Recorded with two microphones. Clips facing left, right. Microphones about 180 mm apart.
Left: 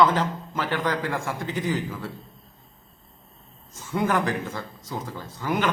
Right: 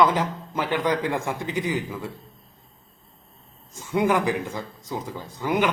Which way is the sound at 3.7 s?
15° right (ahead or behind).